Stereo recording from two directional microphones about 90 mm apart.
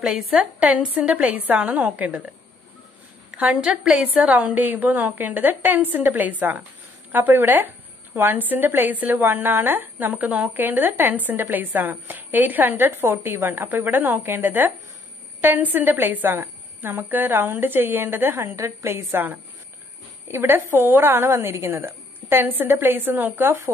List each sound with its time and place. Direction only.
0.0 s a woman's voice: 5° right (ahead or behind)
3.3 s a woman's voice: 10° right (ahead or behind)